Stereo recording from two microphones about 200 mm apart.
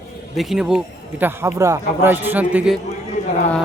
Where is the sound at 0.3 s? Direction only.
Centre (ahead or behind).